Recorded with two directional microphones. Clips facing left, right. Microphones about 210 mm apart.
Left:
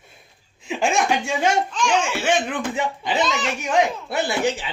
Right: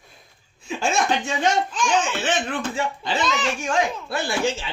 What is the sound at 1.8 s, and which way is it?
Speech, 10° left (ahead or behind).